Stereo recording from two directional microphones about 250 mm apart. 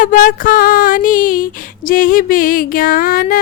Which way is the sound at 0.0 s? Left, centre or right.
Left.